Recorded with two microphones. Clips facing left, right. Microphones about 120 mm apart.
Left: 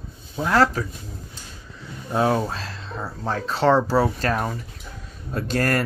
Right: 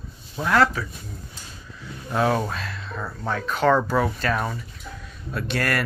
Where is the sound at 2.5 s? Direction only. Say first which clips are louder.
Even; 35° left (ahead or behind).